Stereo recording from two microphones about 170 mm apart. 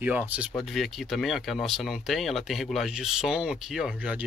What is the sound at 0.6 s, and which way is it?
Speech, centre (ahead or behind).